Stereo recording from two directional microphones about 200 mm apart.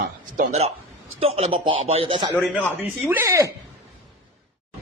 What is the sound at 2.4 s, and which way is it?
A man's voice, 10° right (ahead or behind).